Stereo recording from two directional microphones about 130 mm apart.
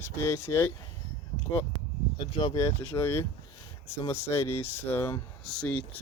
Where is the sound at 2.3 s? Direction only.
30° left (ahead or behind).